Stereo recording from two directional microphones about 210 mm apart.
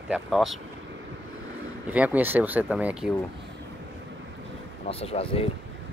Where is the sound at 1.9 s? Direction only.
5° right (ahead or behind).